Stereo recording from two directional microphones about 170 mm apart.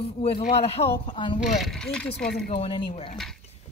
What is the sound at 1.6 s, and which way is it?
Speech, 5° left (ahead or behind).